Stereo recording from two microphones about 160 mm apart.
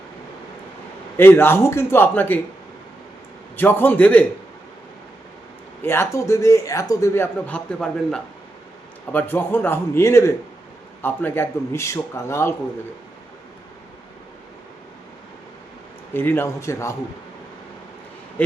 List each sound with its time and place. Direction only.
1.1 s speech: 15° left (ahead or behind)
3.6 s speech: 10° left (ahead or behind)
5.8 s a man's voice: 15° left (ahead or behind)
16.1 s speech: 15° left (ahead or behind)
18.4 s speech: 10° left (ahead or behind)